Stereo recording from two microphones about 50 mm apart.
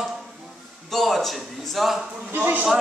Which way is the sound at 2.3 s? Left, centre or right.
Right.